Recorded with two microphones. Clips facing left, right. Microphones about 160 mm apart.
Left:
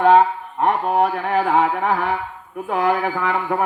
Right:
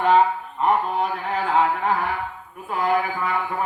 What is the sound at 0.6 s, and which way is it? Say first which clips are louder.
Mantra: left 3 dB; 65° left (ahead or behind).